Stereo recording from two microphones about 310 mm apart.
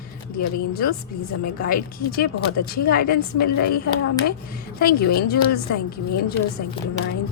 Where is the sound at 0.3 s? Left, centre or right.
Left.